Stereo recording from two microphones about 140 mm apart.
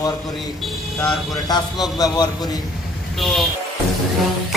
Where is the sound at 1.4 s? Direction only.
30° left (ahead or behind).